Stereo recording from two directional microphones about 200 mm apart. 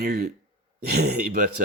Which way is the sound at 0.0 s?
50° right (ahead or behind).